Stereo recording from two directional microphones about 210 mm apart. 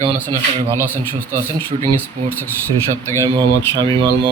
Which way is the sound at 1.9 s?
10° left (ahead or behind).